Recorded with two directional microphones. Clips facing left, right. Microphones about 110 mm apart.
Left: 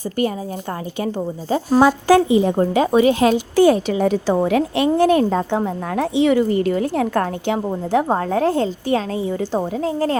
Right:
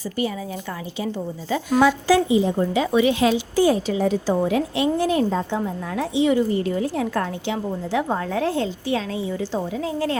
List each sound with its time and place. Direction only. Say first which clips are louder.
0.9 s speech: left 4 dB; 55° left (ahead or behind)
1.5 s speech: left 3 dB; 40° left (ahead or behind)
3.5 s a woman's voice: left 5 dB; 65° left (ahead or behind); by 10.2 s 40° left (ahead or behind)